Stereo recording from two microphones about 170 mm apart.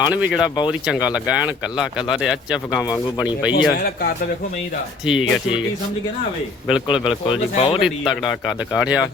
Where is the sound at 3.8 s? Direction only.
65° left (ahead or behind).